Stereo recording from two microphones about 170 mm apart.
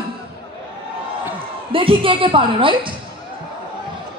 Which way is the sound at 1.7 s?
30° right (ahead or behind).